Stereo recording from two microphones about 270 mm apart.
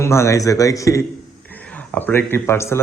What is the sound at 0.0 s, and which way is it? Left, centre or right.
Speech, centre.